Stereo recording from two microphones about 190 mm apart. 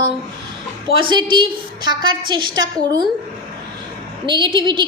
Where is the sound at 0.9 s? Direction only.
25° right (ahead or behind).